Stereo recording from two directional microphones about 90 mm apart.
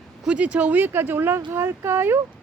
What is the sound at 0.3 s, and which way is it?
Speech, 15° right (ahead or behind).